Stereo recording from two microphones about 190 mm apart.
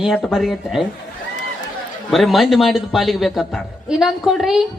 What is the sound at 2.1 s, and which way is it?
A man's voice, centre (ahead or behind).